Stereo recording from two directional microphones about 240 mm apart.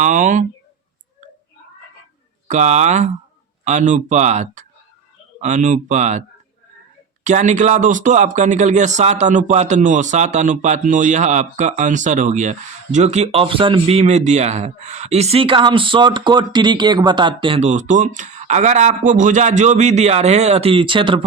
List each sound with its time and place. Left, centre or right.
0.0 s speech: right
2.5 s speech: right
7.3 s speech: right